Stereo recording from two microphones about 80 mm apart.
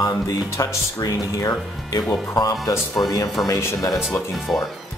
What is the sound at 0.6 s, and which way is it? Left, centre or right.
Speech, left.